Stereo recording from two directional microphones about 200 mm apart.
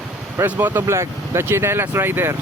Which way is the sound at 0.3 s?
10° right (ahead or behind).